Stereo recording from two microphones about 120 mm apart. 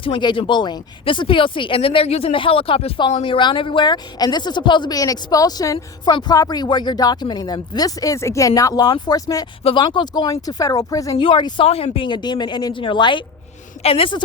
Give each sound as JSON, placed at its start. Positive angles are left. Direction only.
{"t": 0.0, "sound": "speech", "side_deg": 45}
{"t": 11.2, "sound": "speech", "side_deg": 40}
{"t": 11.6, "sound": "speech", "side_deg": 55}